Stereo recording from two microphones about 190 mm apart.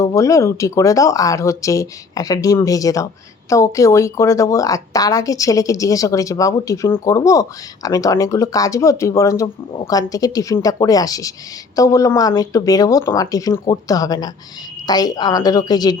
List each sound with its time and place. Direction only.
0.0 s a woman's voice: 15° left (ahead or behind)